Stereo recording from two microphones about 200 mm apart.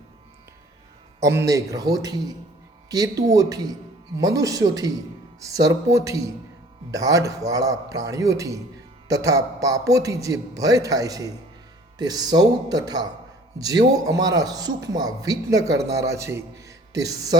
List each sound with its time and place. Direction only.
1.2 s a man's voice: 15° right (ahead or behind)